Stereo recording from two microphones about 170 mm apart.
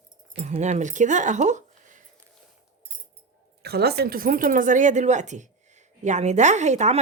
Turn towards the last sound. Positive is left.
turn(degrees=-40)  # may be behind; listen again after turning